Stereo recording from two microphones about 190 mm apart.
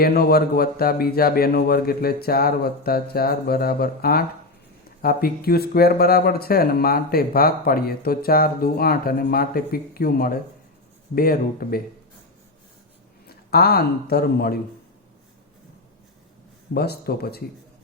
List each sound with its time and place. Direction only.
0.0 s speech: 55° left (ahead or behind)
13.2 s speech: 55° left (ahead or behind)
16.7 s speech: 55° left (ahead or behind)